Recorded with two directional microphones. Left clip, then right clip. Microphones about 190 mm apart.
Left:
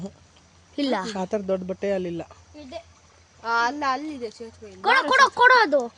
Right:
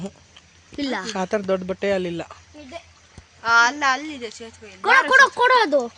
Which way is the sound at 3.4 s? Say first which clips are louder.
Right 7 dB; 10° left (ahead or behind).